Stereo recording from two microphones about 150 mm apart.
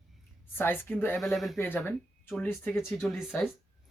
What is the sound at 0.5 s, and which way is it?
Speech, 15° left (ahead or behind).